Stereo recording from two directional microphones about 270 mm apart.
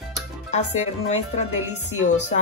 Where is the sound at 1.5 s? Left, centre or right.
Centre.